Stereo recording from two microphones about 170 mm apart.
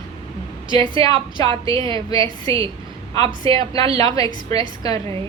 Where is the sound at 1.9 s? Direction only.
20° left (ahead or behind).